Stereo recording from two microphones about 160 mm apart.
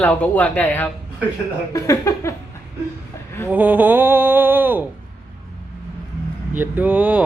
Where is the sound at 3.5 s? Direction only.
10° right (ahead or behind).